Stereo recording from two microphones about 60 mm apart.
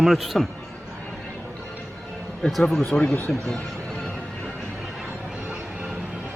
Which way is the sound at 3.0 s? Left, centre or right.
Left.